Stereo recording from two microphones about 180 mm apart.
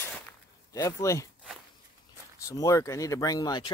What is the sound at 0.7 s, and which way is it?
Speech, 20° left (ahead or behind).